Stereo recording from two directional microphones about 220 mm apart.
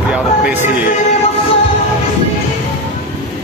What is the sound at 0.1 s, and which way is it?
Music, 5° right (ahead or behind).